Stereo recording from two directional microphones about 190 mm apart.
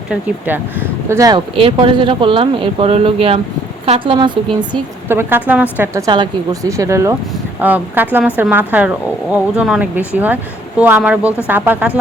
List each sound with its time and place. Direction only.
0.1 s speech: 10° right (ahead or behind); by 4.3 s 25° right (ahead or behind)
5.0 s a woman's voice: 10° right (ahead or behind)